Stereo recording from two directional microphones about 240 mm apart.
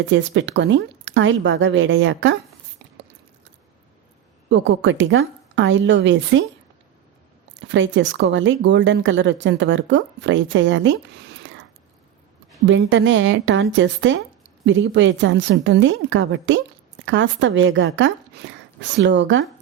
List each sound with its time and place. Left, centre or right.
0.1 s a woman's voice: right
4.4 s a woman's voice: right
7.7 s a woman's voice: right
12.6 s a woman's voice: right